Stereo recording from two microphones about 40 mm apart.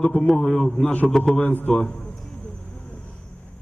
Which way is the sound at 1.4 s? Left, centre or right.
Left.